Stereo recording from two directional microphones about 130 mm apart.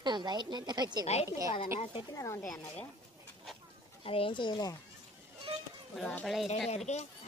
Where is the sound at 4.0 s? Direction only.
45° left (ahead or behind).